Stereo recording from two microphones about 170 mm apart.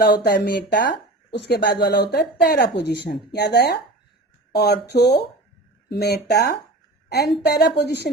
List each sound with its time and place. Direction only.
0.0 s speech: 85° left; by 0.9 s 60° left (ahead or behind)
1.3 s speech: 75° left (ahead or behind)